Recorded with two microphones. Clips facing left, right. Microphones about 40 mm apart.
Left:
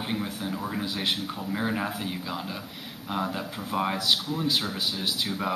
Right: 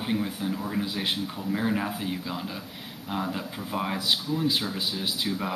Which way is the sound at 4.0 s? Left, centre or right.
Left.